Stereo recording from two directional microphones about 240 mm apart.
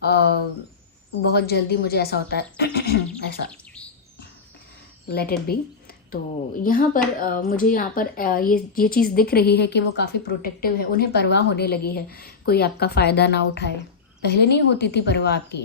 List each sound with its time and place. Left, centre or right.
0.0 s a woman's voice: left
5.0 s a woman's voice: left
6.6 s a woman's voice: left